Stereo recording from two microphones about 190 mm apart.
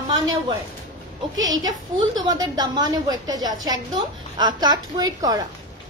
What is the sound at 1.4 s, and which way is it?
A woman's voice, 20° right (ahead or behind).